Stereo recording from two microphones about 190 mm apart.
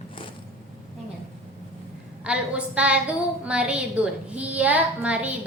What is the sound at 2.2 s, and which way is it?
A woman's voice, 5° right (ahead or behind).